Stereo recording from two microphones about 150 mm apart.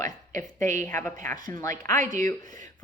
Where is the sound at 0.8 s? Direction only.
15° left (ahead or behind).